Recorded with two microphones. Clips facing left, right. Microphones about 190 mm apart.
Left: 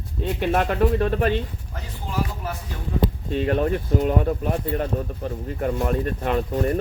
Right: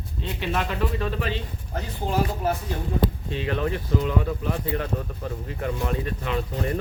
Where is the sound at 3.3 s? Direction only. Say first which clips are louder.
Left 5 dB; 45° left (ahead or behind).